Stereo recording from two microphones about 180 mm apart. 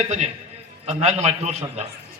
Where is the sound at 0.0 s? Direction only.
40° right (ahead or behind).